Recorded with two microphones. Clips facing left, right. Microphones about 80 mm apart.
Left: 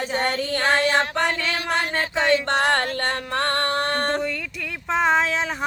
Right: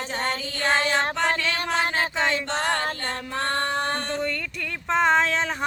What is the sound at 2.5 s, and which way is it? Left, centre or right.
Music, left.